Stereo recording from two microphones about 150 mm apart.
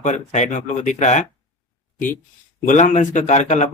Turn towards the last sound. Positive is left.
turn(degrees=50)  # may be behind; listen again after turning